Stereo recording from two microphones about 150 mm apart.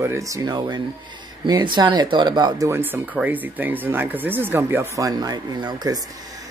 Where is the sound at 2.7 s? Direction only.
10° right (ahead or behind).